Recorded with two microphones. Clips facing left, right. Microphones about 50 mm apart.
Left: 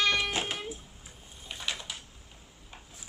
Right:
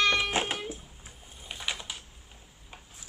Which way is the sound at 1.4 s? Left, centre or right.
Centre.